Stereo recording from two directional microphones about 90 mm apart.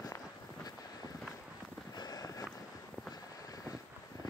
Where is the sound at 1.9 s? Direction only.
50° left (ahead or behind).